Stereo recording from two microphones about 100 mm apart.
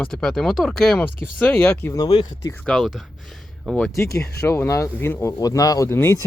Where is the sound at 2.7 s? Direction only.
5° left (ahead or behind).